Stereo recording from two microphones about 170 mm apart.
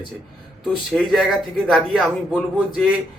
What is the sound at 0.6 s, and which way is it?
Speech, centre (ahead or behind).